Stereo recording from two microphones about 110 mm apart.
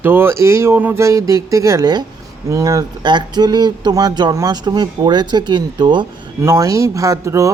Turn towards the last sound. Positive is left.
turn(degrees=-30)  # may be behind; listen again after turning